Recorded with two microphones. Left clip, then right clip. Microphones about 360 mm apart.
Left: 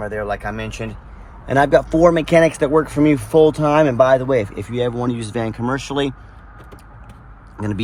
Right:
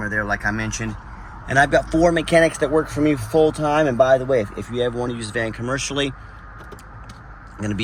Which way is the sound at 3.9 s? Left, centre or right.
Left.